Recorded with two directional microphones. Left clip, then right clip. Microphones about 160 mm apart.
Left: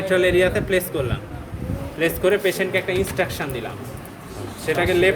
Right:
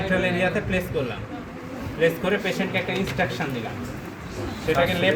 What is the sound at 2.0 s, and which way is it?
Speech, 70° left (ahead or behind).